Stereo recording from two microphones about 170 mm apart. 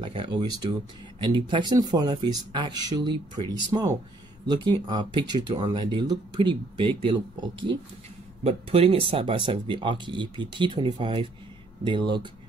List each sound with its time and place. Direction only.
0.0 s speech: 30° right (ahead or behind)
8.5 s speech: 35° right (ahead or behind)